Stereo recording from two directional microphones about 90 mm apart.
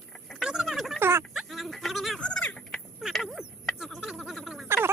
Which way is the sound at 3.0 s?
Centre (ahead or behind).